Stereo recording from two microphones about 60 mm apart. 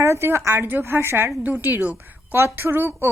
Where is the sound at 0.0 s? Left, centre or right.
Right.